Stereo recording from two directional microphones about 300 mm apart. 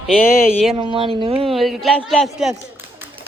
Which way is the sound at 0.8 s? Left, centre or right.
Centre.